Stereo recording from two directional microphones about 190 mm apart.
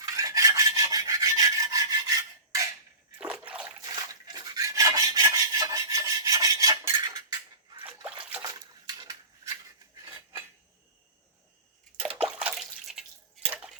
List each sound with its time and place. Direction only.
0.0 s filing: 15° right (ahead or behind)
3.2 s water: 5° right (ahead or behind)
3.8 s rub: 20° right (ahead or behind)
8.0 s water: 10° right (ahead or behind)
8.4 s a sound: 20° right (ahead or behind)
11.9 s bathtub: 5° right (ahead or behind)